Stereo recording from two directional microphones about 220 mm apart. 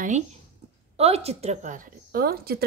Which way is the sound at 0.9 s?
30° right (ahead or behind).